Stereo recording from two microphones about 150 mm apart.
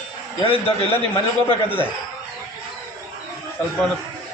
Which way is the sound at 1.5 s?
15° left (ahead or behind).